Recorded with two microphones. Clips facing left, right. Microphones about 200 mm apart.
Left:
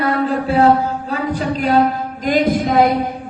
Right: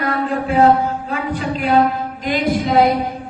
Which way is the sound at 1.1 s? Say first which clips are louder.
Left 2 dB; 35° left (ahead or behind).